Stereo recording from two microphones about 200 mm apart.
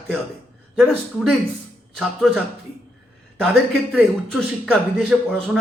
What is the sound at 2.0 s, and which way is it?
Speech, centre (ahead or behind).